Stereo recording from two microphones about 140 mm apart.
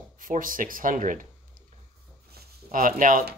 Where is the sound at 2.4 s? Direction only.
75° right (ahead or behind).